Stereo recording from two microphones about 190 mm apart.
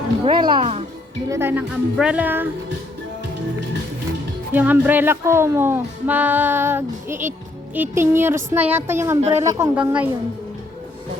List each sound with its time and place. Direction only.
0.3 s speech: 25° right (ahead or behind)
1.3 s speech: 10° right (ahead or behind)
4.5 s speech: 10° right (ahead or behind)